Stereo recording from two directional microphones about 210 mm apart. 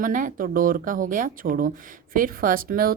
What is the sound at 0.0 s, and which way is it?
A woman's voice, 40° right (ahead or behind).